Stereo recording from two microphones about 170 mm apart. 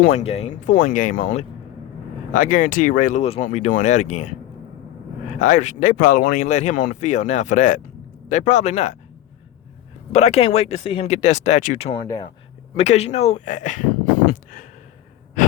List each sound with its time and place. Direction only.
0.1 s speech: 40° left (ahead or behind)
5.4 s speech: 45° left (ahead or behind)
10.1 s speech: 40° left (ahead or behind)
12.0 s speech: 20° left (ahead or behind)
12.7 s speech: 40° left (ahead or behind)
14.3 s a sound: 50° left (ahead or behind)